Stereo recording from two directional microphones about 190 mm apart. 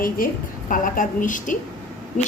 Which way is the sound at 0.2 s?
45° left (ahead or behind).